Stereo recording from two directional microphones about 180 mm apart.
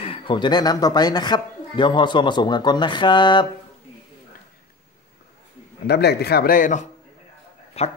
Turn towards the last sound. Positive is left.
turn(degrees=35)  # may be behind; listen again after turning